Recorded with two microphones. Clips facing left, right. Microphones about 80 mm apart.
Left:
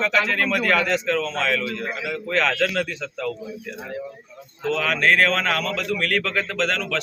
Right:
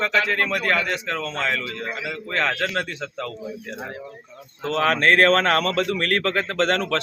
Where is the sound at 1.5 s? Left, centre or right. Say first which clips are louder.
Left 2 dB; right.